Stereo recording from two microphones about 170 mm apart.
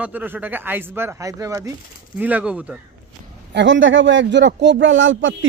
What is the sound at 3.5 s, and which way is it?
Speech, 90° right.